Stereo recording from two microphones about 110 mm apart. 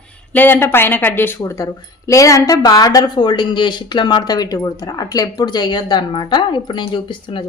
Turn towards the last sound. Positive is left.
turn(degrees=50)  # may be behind; listen again after turning